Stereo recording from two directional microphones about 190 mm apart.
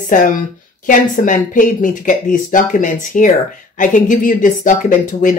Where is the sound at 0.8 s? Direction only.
45° left (ahead or behind).